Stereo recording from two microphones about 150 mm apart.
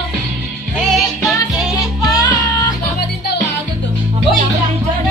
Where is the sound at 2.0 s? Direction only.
25° left (ahead or behind).